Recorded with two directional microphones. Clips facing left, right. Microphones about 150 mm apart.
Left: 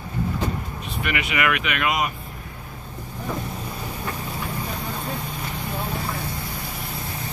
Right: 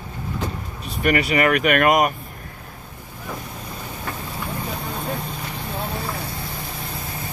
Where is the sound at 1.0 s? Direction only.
40° right (ahead or behind).